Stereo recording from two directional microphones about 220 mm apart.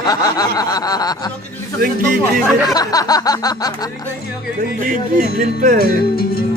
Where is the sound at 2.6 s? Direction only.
15° left (ahead or behind).